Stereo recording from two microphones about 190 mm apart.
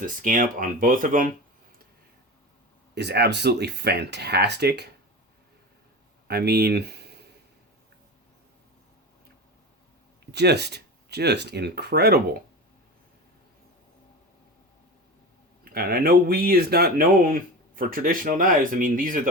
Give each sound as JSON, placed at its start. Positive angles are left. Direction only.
{"t": 0.0, "sound": "speech", "side_deg": -45}
{"t": 2.9, "sound": "speech", "side_deg": -60}
{"t": 6.2, "sound": "speech", "side_deg": -60}
{"t": 10.3, "sound": "speech", "side_deg": -60}
{"t": 15.7, "sound": "speech", "side_deg": -55}